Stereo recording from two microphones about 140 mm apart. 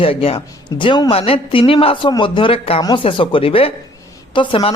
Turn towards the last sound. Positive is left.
turn(degrees=40)  # may be behind; listen again after turning